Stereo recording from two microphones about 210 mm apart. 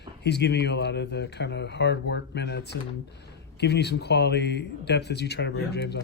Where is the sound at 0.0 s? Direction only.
50° left (ahead or behind).